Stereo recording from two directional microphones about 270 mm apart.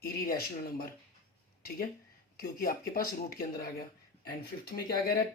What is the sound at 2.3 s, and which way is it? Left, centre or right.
Speech, left.